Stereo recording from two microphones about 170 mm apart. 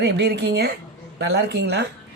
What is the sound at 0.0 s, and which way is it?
Speech, 80° right.